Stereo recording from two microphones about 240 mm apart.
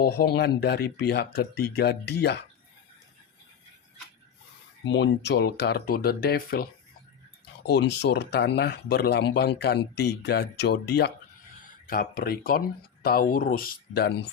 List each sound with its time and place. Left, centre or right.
0.0 s speech: left
4.8 s speech: left
7.7 s speech: left